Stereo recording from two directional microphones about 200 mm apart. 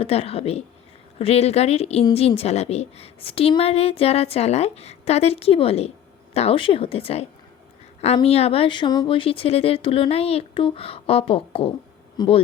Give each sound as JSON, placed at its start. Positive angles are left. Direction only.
{"t": 0.0, "sound": "speech", "side_deg": 30}